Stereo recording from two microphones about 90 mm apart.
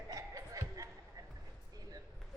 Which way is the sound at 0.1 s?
40° right (ahead or behind).